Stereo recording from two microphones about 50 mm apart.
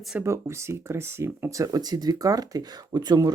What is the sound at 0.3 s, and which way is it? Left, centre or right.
Speech, right.